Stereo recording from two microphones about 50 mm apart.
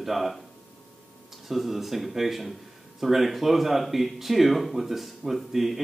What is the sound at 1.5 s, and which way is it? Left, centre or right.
Speech, centre.